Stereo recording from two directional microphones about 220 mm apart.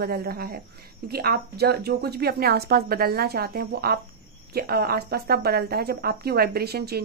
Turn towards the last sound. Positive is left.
turn(degrees=-45)  # may be behind; listen again after turning